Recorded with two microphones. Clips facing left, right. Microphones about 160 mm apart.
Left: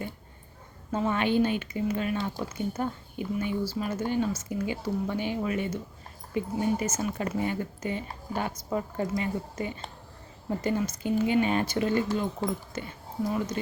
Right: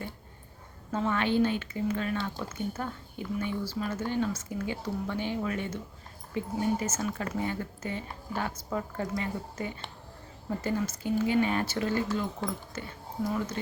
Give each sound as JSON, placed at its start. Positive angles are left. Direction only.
{"t": 0.9, "sound": "speech", "side_deg": 15}